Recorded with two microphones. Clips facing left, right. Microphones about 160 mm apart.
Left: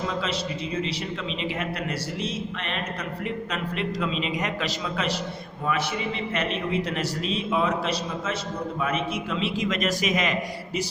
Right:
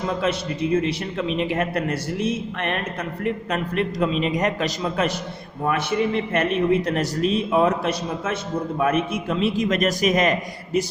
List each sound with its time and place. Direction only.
0.2 s a man's voice: 55° right (ahead or behind)